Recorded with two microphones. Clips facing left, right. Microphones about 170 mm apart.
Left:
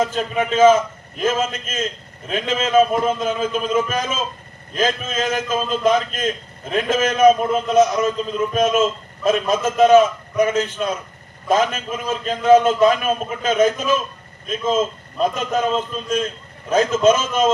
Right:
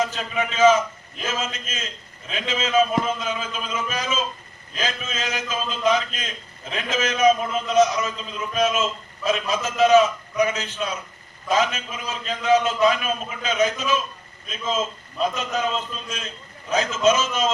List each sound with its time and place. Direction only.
0.0 s a man's voice: 50° left (ahead or behind)